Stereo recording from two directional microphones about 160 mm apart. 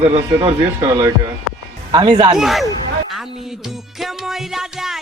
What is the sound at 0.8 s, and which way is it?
Speech, 20° right (ahead or behind).